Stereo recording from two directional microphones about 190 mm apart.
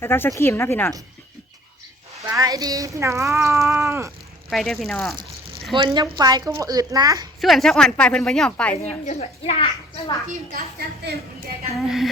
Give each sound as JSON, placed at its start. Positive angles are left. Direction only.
{"t": 0.0, "sound": "speech", "side_deg": 15}
{"t": 2.2, "sound": "speech", "side_deg": -20}
{"t": 4.4, "sound": "speech", "side_deg": 0}
{"t": 5.7, "sound": "speech", "side_deg": -25}
{"t": 7.4, "sound": "speech", "side_deg": 0}
{"t": 9.0, "sound": "a child's voice", "side_deg": 35}
{"t": 10.2, "sound": "a woman's voice", "side_deg": -50}
{"t": 11.7, "sound": "speech", "side_deg": 0}